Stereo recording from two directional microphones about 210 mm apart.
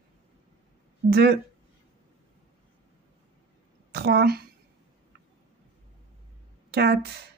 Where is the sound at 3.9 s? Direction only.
50° right (ahead or behind).